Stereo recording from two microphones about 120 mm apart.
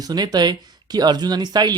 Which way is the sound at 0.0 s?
35° right (ahead or behind).